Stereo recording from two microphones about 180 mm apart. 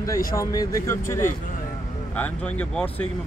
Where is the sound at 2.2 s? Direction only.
5° left (ahead or behind).